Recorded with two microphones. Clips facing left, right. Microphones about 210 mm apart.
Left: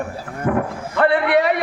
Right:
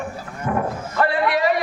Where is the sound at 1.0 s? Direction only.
60° left (ahead or behind).